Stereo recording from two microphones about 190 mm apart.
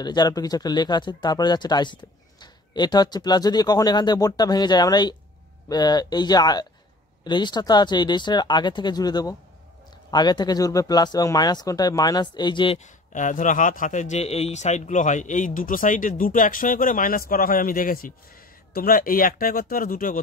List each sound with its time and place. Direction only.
0.0 s speech: 20° left (ahead or behind)
12.7 s a man's voice: 40° left (ahead or behind)